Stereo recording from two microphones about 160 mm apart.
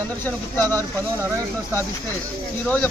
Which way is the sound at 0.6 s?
20° right (ahead or behind).